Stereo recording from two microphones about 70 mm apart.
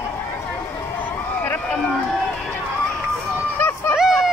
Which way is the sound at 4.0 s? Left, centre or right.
Centre.